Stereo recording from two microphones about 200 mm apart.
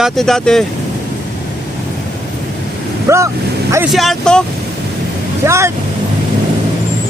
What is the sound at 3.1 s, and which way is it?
Speech, 15° right (ahead or behind).